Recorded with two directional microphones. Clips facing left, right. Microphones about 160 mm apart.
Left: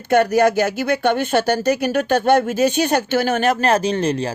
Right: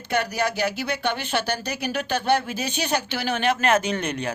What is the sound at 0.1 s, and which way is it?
Speech, 50° left (ahead or behind).